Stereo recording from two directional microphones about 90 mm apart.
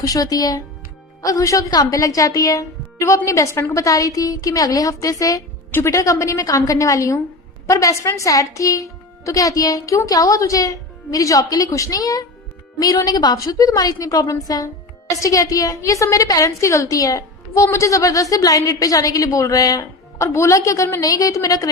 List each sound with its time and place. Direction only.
0.0 s a woman's voice: 40° left (ahead or behind)